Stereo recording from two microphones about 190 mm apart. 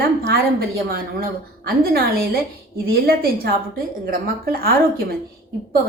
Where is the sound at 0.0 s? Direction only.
55° right (ahead or behind).